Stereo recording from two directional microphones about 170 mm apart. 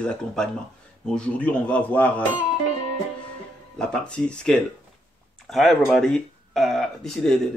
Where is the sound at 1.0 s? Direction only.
5° left (ahead or behind).